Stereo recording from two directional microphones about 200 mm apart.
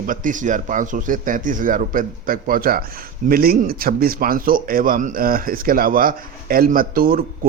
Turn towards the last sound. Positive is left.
turn(degrees=-45)  # may be behind; listen again after turning